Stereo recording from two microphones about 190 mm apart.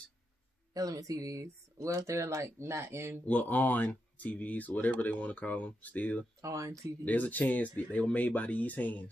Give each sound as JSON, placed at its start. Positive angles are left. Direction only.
{"t": 0.7, "sound": "speech", "side_deg": -20}
{"t": 3.3, "sound": "speech", "side_deg": 10}
{"t": 6.4, "sound": "speech", "side_deg": -15}
{"t": 7.1, "sound": "speech", "side_deg": 10}